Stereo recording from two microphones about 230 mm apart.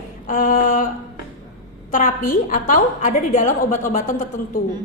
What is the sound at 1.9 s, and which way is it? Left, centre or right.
A woman's voice, left.